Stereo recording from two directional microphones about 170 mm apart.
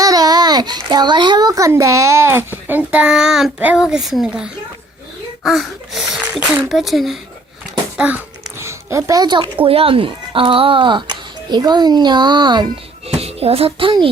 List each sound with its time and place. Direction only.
0.0 s a child's voice: 20° right (ahead or behind); by 7.2 s centre (ahead or behind)
7.9 s music: 10° right (ahead or behind); by 9.5 s 25° right (ahead or behind)
9.6 s a child's voice: 35° right (ahead or behind)